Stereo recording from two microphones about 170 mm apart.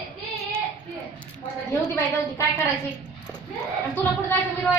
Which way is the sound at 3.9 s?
10° left (ahead or behind).